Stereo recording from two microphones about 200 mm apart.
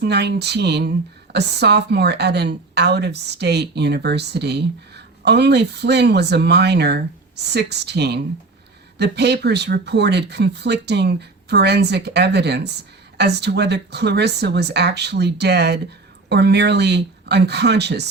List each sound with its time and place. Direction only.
0.0 s speech: 55° right (ahead or behind)